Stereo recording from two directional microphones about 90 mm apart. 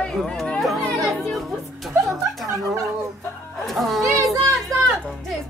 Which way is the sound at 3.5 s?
Centre (ahead or behind).